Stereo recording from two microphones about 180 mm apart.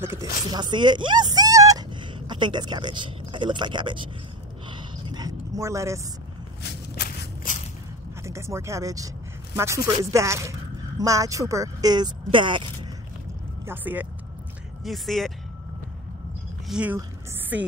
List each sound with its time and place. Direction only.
0.0 s speech: 15° right (ahead or behind)
5.0 s dog: 20° right (ahead or behind)
8.2 s speech: 15° right (ahead or behind)
13.7 s speech: 10° right (ahead or behind)
14.9 s speech: centre (ahead or behind)
16.6 s speech: 5° right (ahead or behind)